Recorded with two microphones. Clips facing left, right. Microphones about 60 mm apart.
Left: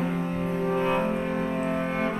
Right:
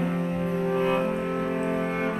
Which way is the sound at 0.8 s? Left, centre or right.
Centre.